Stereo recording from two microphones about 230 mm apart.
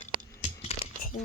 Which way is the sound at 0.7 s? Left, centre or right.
Left.